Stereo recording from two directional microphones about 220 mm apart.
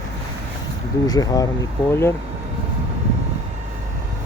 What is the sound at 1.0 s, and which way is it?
Speech, 15° left (ahead or behind).